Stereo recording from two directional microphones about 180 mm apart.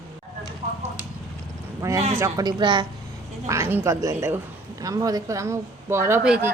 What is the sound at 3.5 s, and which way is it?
A woman's voice, 15° right (ahead or behind).